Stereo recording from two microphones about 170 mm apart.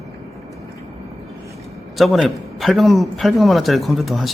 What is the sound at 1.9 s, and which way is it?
A man's voice, centre (ahead or behind).